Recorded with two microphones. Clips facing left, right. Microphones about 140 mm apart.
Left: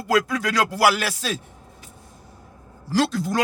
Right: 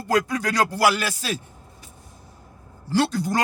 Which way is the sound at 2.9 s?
90° left.